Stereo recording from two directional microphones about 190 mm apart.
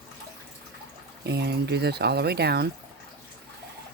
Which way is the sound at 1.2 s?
60° right (ahead or behind).